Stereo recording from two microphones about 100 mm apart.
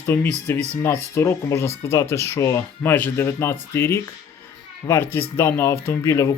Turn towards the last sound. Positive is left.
turn(degrees=25)  # may be behind; listen again after turning